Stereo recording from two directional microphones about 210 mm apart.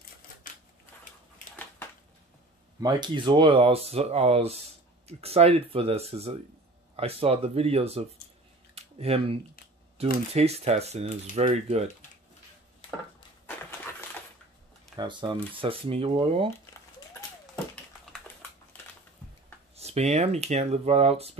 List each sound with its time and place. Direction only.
2.8 s speech: 20° right (ahead or behind)
8.7 s a sound: 30° right (ahead or behind)
10.0 s speech: 30° right (ahead or behind)
15.0 s speech: 20° right (ahead or behind)
19.7 s speech: 30° right (ahead or behind)